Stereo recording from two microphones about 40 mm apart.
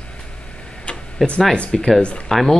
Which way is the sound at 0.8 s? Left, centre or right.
Left.